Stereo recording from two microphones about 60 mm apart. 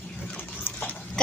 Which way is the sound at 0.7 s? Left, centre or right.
Left.